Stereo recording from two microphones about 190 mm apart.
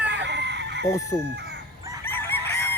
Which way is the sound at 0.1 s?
65° right (ahead or behind).